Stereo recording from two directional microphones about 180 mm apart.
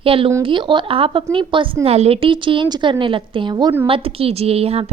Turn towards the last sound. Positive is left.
turn(degrees=-35)  # may be behind; listen again after turning